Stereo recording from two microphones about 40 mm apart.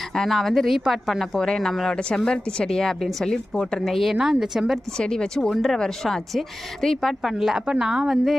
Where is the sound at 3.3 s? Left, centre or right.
Left.